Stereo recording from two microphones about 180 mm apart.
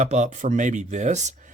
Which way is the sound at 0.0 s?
40° right (ahead or behind).